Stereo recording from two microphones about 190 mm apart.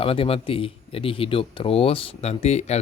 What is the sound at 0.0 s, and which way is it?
Speech, 30° left (ahead or behind).